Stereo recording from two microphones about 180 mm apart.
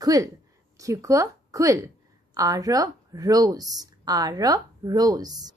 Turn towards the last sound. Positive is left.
turn(degrees=-20)  # may be behind; listen again after turning